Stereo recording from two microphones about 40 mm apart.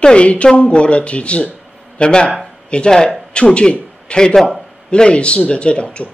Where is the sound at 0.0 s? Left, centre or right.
Left.